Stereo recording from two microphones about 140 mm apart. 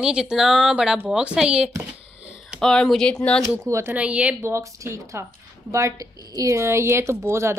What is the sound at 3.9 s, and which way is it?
Speech, 10° right (ahead or behind).